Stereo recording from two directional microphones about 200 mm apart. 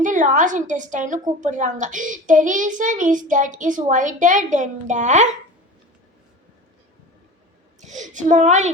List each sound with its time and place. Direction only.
0.0 s a child's voice: 40° right (ahead or behind)
7.8 s a child's voice: 35° right (ahead or behind)